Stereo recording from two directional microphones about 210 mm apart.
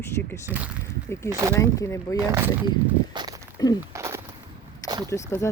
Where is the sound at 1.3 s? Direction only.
15° right (ahead or behind).